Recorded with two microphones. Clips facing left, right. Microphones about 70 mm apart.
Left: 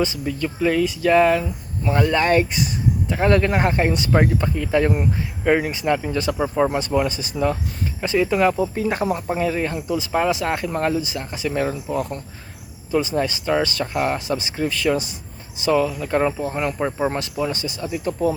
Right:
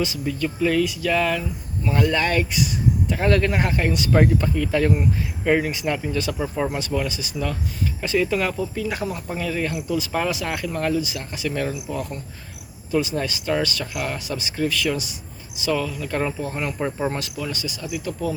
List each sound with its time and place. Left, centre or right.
0.6 s speech: left
6.1 s speech: left
6.5 s speech: centre
6.7 s speech: left
16.6 s speech: centre
17.2 s speech: left